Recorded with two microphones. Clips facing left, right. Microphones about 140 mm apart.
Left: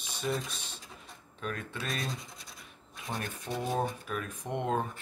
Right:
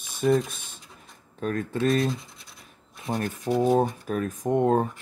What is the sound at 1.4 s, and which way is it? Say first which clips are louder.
Speech: right 12 dB; 45° right (ahead or behind).